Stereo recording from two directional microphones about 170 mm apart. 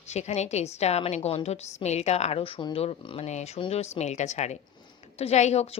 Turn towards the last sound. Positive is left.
turn(degrees=40)  # may be behind; listen again after turning